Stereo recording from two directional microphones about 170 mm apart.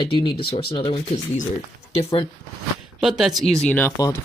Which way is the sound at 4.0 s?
20° left (ahead or behind).